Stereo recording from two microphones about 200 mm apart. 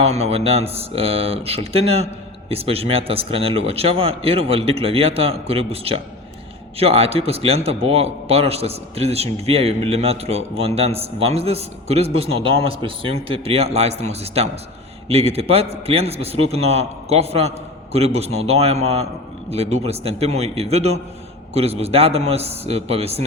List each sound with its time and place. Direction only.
0.0 s a man's voice: 30° right (ahead or behind)